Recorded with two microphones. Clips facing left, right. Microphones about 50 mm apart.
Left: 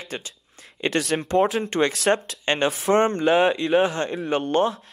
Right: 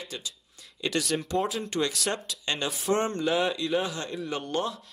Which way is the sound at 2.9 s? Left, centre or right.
Left.